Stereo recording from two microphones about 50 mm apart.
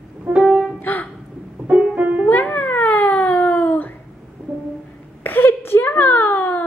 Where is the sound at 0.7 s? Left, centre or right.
Left.